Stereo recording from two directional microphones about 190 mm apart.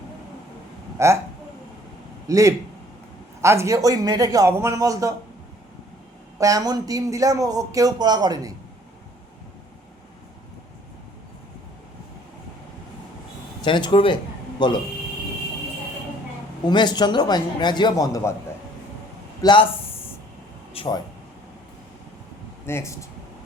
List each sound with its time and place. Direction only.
0.9 s speech: 15° right (ahead or behind)
2.2 s a man's voice: 15° right (ahead or behind)
6.4 s speech: 20° right (ahead or behind)
13.6 s a man's voice: 25° left (ahead or behind)
16.6 s a man's voice: 25° left (ahead or behind)
19.4 s speech: 25° left (ahead or behind)
20.7 s speech: 25° left (ahead or behind)
22.6 s speech: 15° left (ahead or behind)